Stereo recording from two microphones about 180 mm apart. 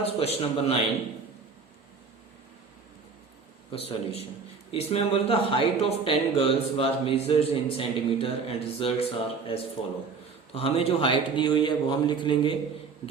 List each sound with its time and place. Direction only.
0.0 s speech: 35° left (ahead or behind)
3.7 s a man's voice: 30° left (ahead or behind)